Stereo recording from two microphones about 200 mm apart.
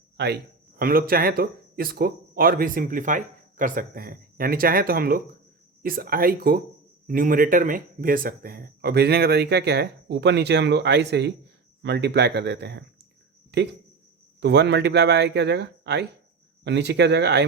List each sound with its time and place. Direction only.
0.8 s speech: 45° right (ahead or behind)